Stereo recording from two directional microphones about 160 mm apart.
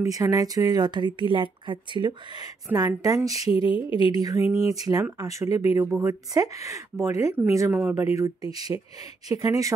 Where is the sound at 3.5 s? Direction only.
35° left (ahead or behind).